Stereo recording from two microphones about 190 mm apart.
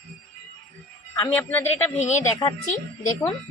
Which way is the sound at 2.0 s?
35° left (ahead or behind).